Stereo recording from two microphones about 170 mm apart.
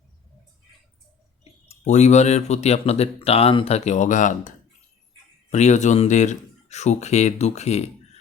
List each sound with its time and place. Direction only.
1.6 s speech: 40° left (ahead or behind)